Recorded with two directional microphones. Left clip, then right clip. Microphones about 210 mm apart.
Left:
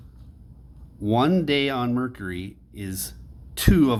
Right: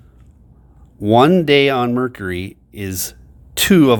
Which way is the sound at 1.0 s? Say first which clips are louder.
Right 10 dB; 40° right (ahead or behind).